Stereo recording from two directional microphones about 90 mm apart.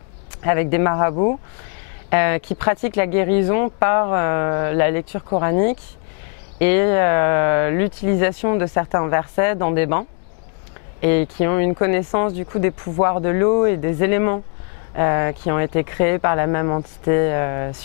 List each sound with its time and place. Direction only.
0.4 s speech: 15° left (ahead or behind)